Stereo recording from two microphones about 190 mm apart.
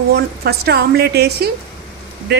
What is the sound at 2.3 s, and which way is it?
Speech, 60° right (ahead or behind).